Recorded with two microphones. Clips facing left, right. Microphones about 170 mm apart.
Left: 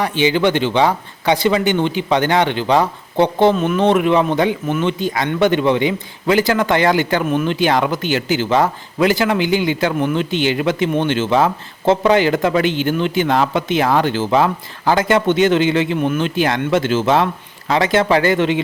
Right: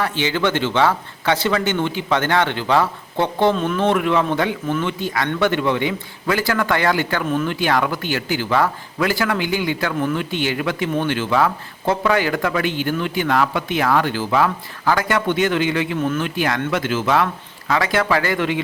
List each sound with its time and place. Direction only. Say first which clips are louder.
0.0 s speech: left 5 dB; 15° left (ahead or behind)
3.8 s speech: left 4 dB; 20° left (ahead or behind)